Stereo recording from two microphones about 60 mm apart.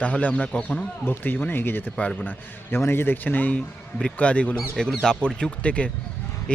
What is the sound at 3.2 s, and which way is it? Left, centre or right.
Speech, left.